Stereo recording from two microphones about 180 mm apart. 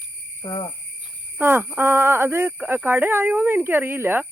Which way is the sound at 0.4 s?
20° left (ahead or behind).